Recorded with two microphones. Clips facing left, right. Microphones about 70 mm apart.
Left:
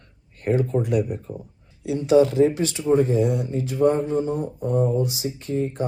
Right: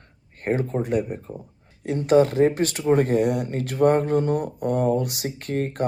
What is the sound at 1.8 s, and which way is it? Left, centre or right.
Speech, right.